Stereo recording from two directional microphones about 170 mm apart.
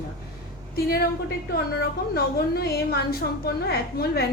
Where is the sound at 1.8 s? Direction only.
65° left (ahead or behind).